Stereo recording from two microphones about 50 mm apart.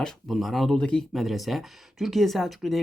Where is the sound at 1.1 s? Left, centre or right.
Centre.